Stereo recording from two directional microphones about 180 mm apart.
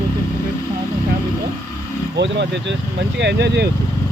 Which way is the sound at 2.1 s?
75° right (ahead or behind).